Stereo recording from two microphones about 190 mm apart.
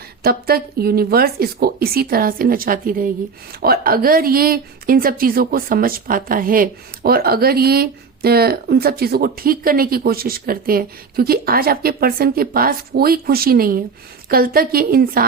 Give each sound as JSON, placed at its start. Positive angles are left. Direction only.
{"t": 0.2, "sound": "speech", "side_deg": -55}